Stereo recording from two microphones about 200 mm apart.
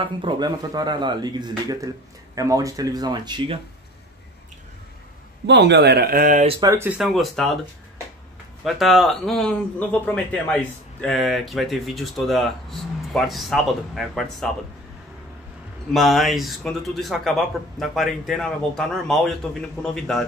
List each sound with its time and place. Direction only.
0.0 s a man's voice: 25° right (ahead or behind)
5.5 s speech: 60° right (ahead or behind)
6.4 s speech: 15° right (ahead or behind); by 7.5 s centre (ahead or behind)
8.6 s speech: centre (ahead or behind)
15.9 s speech: centre (ahead or behind)